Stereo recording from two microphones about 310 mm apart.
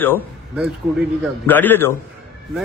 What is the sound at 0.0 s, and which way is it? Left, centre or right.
A man's voice, centre.